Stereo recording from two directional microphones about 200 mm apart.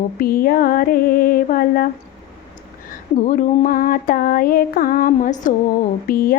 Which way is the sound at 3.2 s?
40° left (ahead or behind).